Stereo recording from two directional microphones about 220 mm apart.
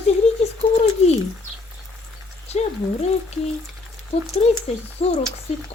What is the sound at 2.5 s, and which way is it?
A woman's voice, 30° left (ahead or behind).